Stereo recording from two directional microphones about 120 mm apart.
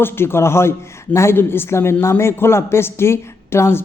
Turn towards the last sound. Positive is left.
turn(degrees=20)  # may be behind; listen again after turning